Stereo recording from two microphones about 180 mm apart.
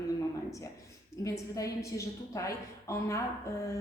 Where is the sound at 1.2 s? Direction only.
15° left (ahead or behind).